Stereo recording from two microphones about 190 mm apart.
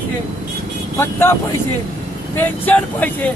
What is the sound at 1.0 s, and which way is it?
Speech, 10° left (ahead or behind).